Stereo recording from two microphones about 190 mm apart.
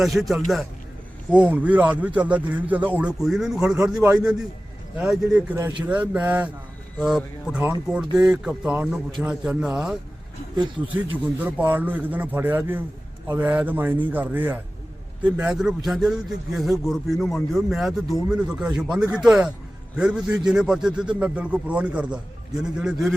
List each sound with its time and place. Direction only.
0.0 s a man's voice: centre (ahead or behind)